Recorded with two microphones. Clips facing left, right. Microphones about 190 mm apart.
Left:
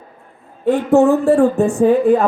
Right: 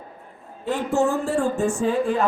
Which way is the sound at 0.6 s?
60° left (ahead or behind).